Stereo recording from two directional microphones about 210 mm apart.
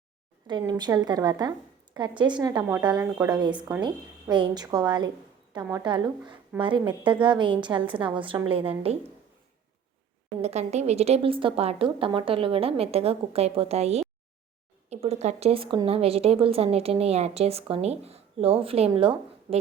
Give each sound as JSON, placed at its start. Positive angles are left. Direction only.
{"t": 0.4, "sound": "a woman's voice", "side_deg": -20}
{"t": 10.4, "sound": "a woman's voice", "side_deg": -30}